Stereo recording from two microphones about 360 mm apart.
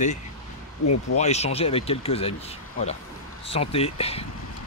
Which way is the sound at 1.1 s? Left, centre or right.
Centre.